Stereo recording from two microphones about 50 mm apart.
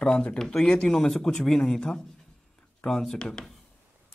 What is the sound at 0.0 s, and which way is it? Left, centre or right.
Speech, centre.